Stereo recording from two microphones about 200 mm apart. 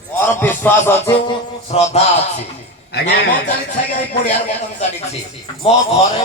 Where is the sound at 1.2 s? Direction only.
30° left (ahead or behind).